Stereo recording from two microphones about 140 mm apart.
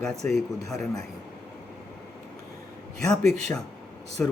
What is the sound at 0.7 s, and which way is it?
Speech, 5° left (ahead or behind).